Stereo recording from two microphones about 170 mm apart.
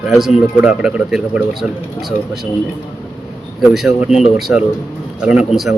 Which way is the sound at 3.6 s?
Centre (ahead or behind).